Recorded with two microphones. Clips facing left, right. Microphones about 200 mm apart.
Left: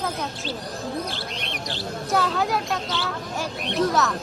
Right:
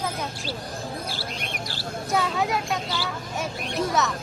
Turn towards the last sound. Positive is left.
turn(degrees=0)  # may be behind; listen again after turning